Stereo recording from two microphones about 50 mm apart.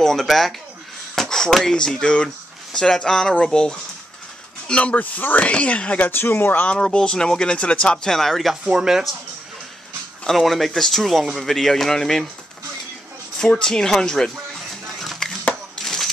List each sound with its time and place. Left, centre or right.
0.0 s speech: centre; by 4.9 s left
4.9 s speech: left
5.9 s speech: left
6.7 s speech: centre
8.0 s speech: centre
8.6 s speech: centre
10.2 s speech: centre
13.4 s speech: centre
14.5 s music: centre
15.8 s a sound: centre